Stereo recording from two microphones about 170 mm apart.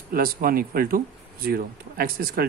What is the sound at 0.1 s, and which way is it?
Speech, 60° right (ahead or behind).